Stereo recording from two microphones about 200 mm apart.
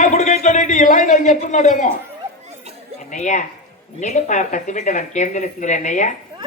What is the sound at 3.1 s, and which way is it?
Speech, 40° left (ahead or behind).